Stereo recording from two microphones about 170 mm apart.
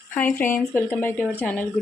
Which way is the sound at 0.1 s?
10° left (ahead or behind).